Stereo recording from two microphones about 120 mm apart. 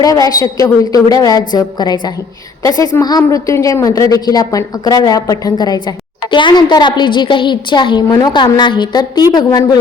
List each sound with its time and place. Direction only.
0.0 s a woman's voice: 30° left (ahead or behind)